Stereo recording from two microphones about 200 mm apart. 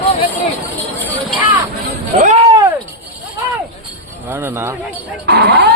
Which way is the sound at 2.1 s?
35° right (ahead or behind).